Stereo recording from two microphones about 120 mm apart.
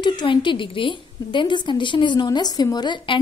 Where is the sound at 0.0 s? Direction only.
40° left (ahead or behind).